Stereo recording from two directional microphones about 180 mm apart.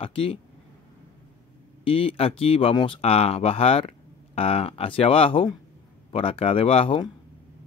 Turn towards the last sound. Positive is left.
turn(degrees=30)  # may be behind; listen again after turning